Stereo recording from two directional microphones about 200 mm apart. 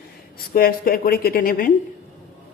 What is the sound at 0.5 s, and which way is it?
Speech, 45° left (ahead or behind).